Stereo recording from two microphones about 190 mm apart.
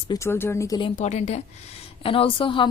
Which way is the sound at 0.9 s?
35° left (ahead or behind).